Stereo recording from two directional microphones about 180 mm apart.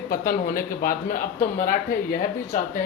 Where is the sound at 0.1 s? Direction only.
50° left (ahead or behind).